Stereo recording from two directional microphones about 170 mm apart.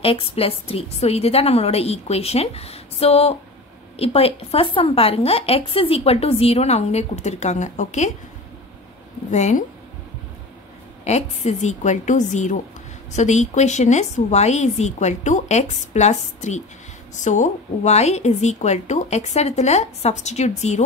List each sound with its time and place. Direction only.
0.0 s speech: 35° left (ahead or behind)
9.3 s a woman's voice: 45° left (ahead or behind)
11.1 s a woman's voice: 40° left (ahead or behind)